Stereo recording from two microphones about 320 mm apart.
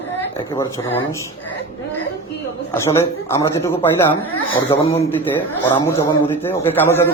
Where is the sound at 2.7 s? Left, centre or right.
Centre.